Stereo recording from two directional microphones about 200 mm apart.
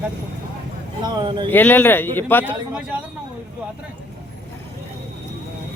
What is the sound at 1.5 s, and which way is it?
Speech, 10° left (ahead or behind).